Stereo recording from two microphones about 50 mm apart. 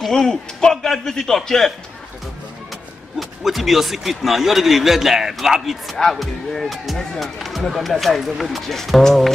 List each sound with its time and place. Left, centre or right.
0.1 s a man's voice: centre
3.2 s speech: centre
5.9 s speech: centre